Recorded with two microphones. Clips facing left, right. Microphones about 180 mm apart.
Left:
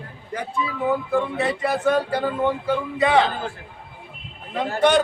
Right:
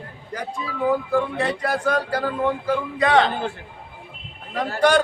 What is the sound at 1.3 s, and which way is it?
A man's voice, 5° left (ahead or behind).